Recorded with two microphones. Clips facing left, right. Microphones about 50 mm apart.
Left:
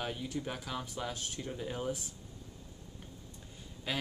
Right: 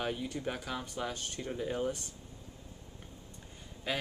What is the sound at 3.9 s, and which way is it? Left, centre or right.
Speech, centre.